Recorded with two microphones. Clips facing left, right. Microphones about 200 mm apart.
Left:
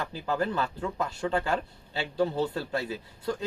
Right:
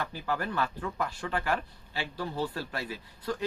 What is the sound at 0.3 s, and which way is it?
Speech, 25° left (ahead or behind).